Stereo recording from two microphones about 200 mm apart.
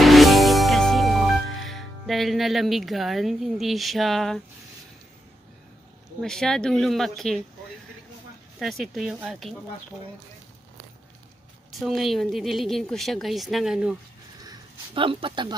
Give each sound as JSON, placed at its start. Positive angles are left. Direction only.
{"t": 0.0, "sound": "music", "side_deg": 0}
{"t": 6.2, "sound": "speech", "side_deg": 5}
{"t": 8.5, "sound": "speech", "side_deg": 0}
{"t": 11.8, "sound": "speech", "side_deg": 0}
{"t": 14.4, "sound": "a sound", "side_deg": -20}